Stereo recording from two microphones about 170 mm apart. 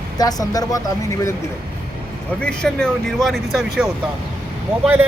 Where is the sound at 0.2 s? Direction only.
20° left (ahead or behind).